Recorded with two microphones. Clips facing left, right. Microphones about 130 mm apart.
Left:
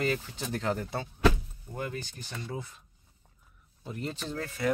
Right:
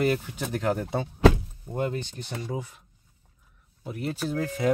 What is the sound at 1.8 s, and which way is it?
Speech, 20° right (ahead or behind).